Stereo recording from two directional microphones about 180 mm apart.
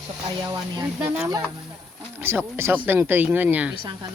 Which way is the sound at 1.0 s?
15° right (ahead or behind).